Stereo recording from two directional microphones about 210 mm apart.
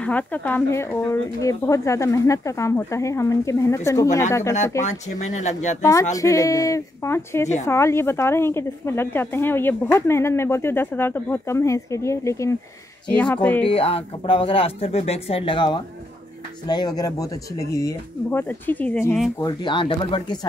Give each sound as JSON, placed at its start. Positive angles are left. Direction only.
{"t": 0.0, "sound": "speech", "side_deg": 5}
{"t": 4.8, "sound": "speech", "side_deg": 35}
{"t": 5.8, "sound": "speech", "side_deg": 15}
{"t": 13.7, "sound": "speech", "side_deg": 25}
{"t": 19.4, "sound": "speech", "side_deg": 20}